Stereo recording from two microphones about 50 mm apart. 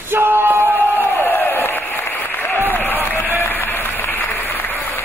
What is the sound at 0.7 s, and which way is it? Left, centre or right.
Crowd, left.